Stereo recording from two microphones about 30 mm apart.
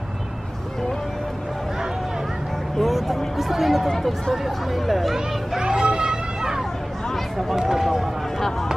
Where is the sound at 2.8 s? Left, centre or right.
Centre.